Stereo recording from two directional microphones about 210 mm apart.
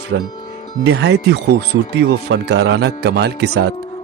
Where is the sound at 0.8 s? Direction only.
55° right (ahead or behind).